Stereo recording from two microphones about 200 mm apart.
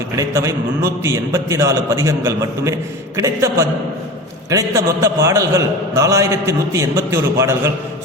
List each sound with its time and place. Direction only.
0.2 s a man's voice: 15° right (ahead or behind)